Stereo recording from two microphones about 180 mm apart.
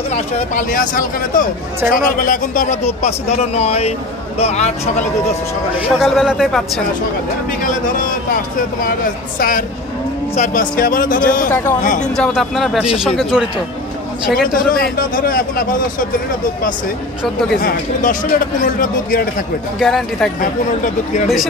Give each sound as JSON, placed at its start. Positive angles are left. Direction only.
{"t": 0.1, "sound": "speech", "side_deg": 50}
{"t": 5.8, "sound": "speech", "side_deg": 0}
{"t": 7.6, "sound": "speech", "side_deg": 45}
{"t": 12.2, "sound": "speech", "side_deg": 0}
{"t": 14.7, "sound": "speech", "side_deg": 50}
{"t": 17.6, "sound": "speech", "side_deg": 50}
{"t": 19.8, "sound": "speech", "side_deg": 0}
{"t": 20.3, "sound": "speech", "side_deg": 45}